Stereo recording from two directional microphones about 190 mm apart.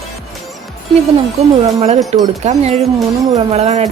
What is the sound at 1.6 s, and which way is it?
Speech, 35° right (ahead or behind).